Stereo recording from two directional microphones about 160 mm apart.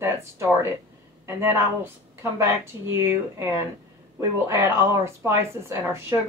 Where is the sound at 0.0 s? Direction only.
15° right (ahead or behind).